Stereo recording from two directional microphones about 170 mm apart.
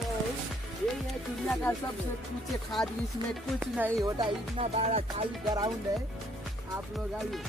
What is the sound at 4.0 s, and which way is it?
Music, 30° right (ahead or behind).